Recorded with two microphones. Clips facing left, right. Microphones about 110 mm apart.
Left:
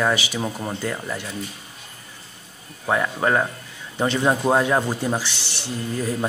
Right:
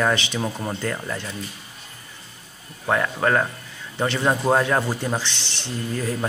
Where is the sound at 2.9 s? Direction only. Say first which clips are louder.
Even; 10° left (ahead or behind).